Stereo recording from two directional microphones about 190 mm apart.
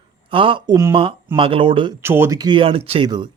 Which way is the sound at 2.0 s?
15° right (ahead or behind).